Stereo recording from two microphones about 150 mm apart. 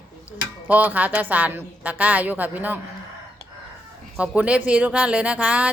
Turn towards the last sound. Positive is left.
turn(degrees=-10)  # may be behind; listen again after turning